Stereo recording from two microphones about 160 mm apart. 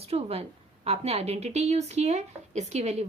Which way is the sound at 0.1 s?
40° right (ahead or behind).